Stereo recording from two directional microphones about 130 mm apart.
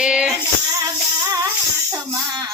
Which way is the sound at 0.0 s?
5° right (ahead or behind).